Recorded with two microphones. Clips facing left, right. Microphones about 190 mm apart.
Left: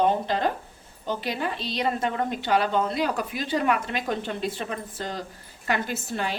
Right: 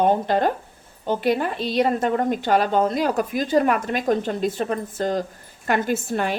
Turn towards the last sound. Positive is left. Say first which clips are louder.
# right 7 dB
turn(degrees=-55)  # may be behind; listen again after turning